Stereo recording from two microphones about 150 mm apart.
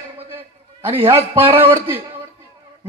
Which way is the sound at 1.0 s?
35° right (ahead or behind).